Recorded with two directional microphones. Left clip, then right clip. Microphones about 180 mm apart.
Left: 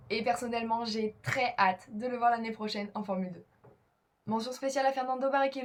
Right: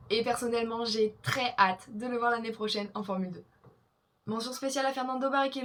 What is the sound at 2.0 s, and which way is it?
Speech, 50° right (ahead or behind).